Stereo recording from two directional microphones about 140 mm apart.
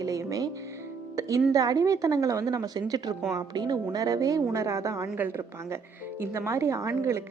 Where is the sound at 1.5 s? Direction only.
25° right (ahead or behind).